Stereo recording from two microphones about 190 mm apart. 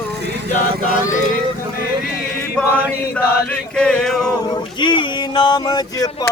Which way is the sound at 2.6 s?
10° left (ahead or behind).